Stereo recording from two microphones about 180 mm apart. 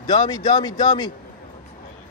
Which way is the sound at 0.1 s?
20° left (ahead or behind).